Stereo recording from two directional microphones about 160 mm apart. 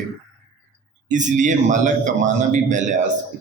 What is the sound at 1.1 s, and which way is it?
A man's voice, 50° right (ahead or behind).